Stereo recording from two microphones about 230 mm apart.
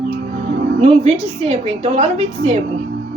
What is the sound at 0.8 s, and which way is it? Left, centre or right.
A woman's voice, right.